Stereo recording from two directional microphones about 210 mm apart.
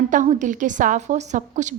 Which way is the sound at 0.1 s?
35° right (ahead or behind).